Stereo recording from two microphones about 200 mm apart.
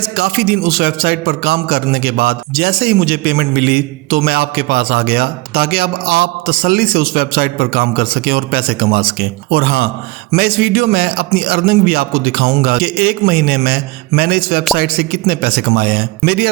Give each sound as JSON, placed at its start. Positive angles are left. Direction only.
{"t": 0.2, "sound": "a man's voice", "side_deg": -50}